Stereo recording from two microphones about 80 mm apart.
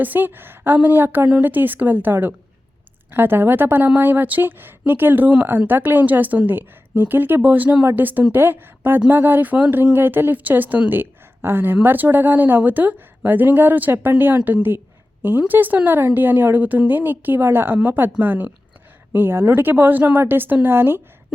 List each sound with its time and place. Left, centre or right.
0.0 s a woman's voice: right